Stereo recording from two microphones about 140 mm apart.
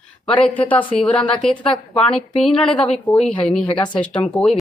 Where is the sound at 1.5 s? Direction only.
40° left (ahead or behind).